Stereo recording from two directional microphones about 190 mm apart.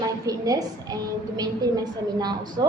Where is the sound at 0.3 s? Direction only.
20° right (ahead or behind).